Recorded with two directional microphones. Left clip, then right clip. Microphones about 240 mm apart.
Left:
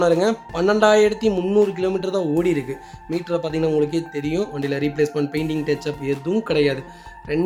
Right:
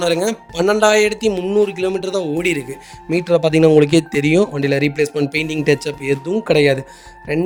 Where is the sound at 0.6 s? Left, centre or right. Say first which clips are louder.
Right 2 dB; right.